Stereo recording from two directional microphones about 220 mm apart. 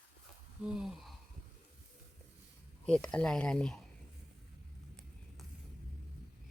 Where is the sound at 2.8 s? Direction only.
5° left (ahead or behind).